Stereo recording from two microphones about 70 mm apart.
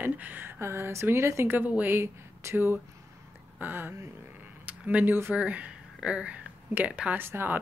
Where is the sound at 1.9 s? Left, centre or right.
Right.